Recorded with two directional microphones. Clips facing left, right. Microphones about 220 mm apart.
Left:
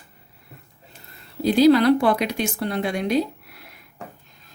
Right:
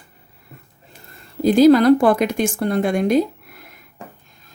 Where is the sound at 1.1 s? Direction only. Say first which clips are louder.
Right 4 dB; 50° right (ahead or behind).